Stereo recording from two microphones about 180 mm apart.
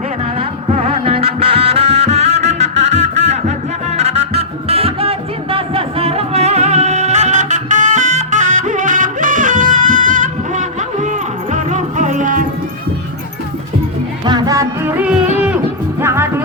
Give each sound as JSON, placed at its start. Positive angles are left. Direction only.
{"t": 0.3, "sound": "music", "side_deg": -35}
{"t": 14.3, "sound": "music", "side_deg": -25}